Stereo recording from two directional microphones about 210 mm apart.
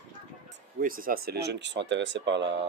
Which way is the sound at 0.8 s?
40° right (ahead or behind).